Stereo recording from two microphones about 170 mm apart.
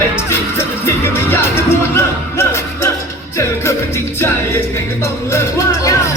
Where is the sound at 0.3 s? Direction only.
15° left (ahead or behind).